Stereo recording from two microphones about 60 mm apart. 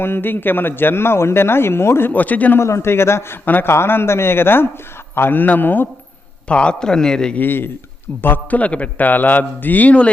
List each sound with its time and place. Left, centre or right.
0.0 s a man's voice: left
2.6 s a man's voice: left
3.4 s a man's voice: left
3.7 s a man's voice: left
6.5 s a man's voice: centre
7.3 s a man's voice: left